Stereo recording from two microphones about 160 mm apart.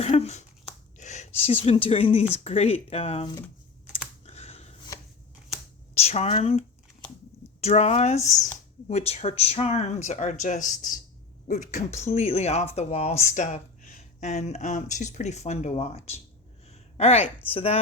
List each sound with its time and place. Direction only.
0.0 s speech: 40° left (ahead or behind)
4.3 s a sound: 40° left (ahead or behind)
5.9 s speech: 40° left (ahead or behind)